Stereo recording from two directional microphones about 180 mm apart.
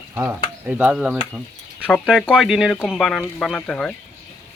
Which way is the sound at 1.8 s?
5° left (ahead or behind).